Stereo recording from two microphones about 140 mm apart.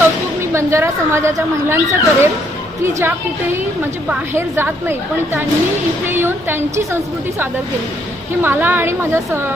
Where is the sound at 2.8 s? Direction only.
20° right (ahead or behind).